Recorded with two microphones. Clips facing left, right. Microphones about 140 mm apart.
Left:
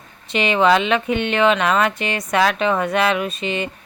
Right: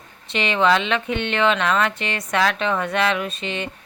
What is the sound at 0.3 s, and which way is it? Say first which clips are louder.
Speech: left 3 dB; 10° left (ahead or behind).